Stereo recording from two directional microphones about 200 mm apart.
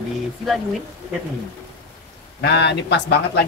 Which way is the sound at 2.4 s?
60° left (ahead or behind).